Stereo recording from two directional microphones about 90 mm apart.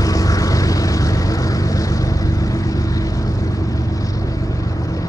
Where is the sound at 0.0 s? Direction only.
40° left (ahead or behind).